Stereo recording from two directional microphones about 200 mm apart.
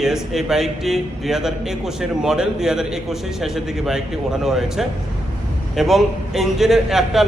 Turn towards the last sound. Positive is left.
turn(degrees=0)  # may be behind; listen again after turning